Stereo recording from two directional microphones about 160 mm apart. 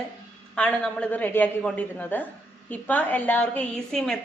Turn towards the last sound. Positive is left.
turn(degrees=5)  # may be behind; listen again after turning